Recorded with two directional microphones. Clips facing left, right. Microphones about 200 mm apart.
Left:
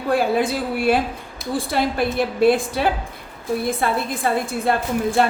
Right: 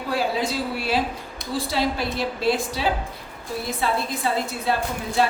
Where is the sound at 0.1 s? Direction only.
55° left (ahead or behind).